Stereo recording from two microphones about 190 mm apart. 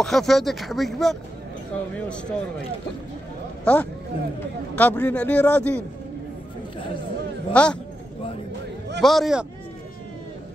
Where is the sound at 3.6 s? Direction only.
5° left (ahead or behind).